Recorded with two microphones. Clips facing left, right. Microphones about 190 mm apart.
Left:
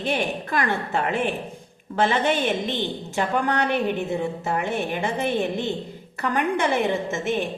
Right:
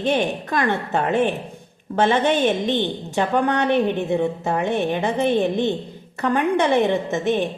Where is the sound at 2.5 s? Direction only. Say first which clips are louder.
Right 4 dB; 20° right (ahead or behind).